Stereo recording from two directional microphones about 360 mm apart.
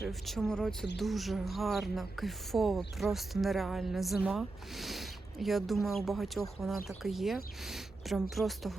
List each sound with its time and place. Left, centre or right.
0.0 s speech: centre